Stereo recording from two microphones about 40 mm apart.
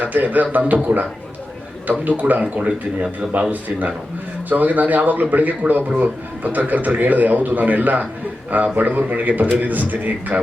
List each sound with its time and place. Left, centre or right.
0.0 s a man's voice: right
2.4 s speech: right
3.5 s a man's voice: right